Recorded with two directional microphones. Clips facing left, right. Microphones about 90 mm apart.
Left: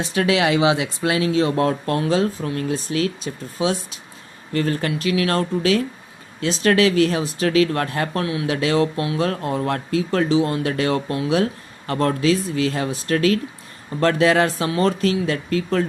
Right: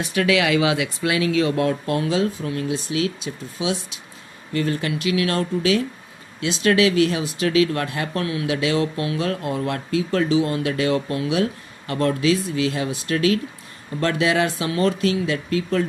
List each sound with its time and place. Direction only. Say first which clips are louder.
0.0 s speech: left 1 dB; 30° left (ahead or behind)